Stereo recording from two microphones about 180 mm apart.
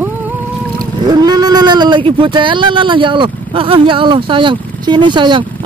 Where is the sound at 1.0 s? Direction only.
20° right (ahead or behind).